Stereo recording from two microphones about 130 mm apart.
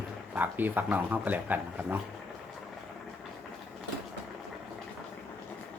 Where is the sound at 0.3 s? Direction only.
15° right (ahead or behind).